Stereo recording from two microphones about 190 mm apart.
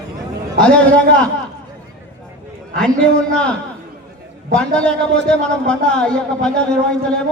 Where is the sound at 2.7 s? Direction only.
5° left (ahead or behind).